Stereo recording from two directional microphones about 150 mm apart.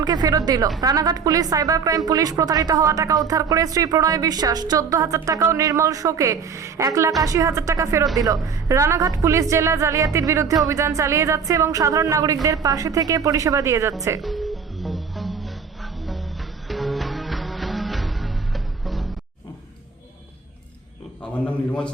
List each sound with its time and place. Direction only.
0.0 s speech: 25° right (ahead or behind)
14.2 s music: centre (ahead or behind)
21.4 s a man's voice: 10° left (ahead or behind)